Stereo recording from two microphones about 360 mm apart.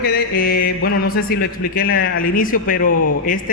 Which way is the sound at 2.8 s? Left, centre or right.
Left.